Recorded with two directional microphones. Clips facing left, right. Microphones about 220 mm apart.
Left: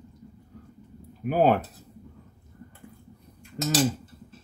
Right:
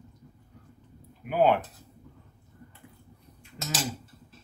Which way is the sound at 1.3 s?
40° left (ahead or behind).